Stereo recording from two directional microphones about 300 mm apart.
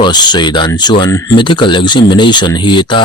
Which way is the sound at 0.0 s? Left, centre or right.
Centre.